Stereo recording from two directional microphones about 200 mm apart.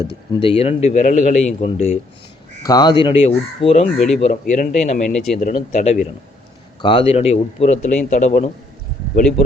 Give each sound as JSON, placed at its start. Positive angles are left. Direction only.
{"t": 0.3, "sound": "speech", "side_deg": 25}
{"t": 2.6, "sound": "speech", "side_deg": 20}
{"t": 3.9, "sound": "speech", "side_deg": 0}
{"t": 4.2, "sound": "speech", "side_deg": 40}
{"t": 5.0, "sound": "speech", "side_deg": 0}
{"t": 5.4, "sound": "speech", "side_deg": 40}